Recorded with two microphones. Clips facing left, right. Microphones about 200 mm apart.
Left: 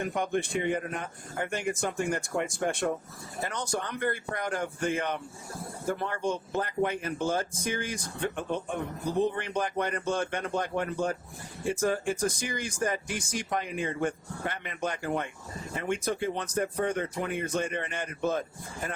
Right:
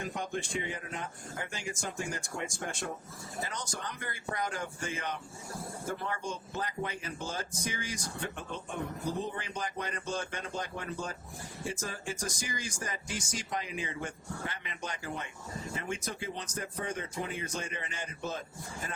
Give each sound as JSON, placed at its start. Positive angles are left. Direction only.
{"t": 0.0, "sound": "speech", "side_deg": 60}